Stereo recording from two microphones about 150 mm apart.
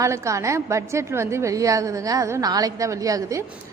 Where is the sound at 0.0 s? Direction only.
20° right (ahead or behind).